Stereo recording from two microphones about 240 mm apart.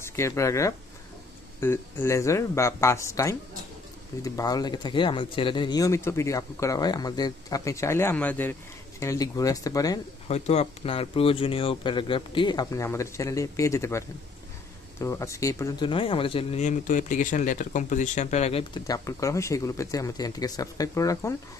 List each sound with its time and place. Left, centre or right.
0.0 s speech: centre
10.2 s speech: left